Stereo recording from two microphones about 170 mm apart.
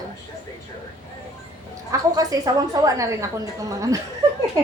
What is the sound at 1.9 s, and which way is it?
A woman's voice, 20° right (ahead or behind).